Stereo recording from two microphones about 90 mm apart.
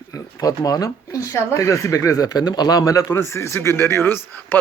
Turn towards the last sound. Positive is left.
turn(degrees=25)  # may be behind; listen again after turning